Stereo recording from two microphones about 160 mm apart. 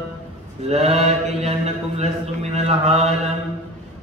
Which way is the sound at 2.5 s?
40° right (ahead or behind).